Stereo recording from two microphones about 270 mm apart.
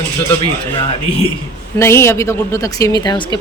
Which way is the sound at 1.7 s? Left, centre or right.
Centre.